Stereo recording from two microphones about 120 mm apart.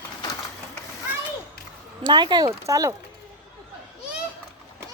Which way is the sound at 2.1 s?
40° right (ahead or behind).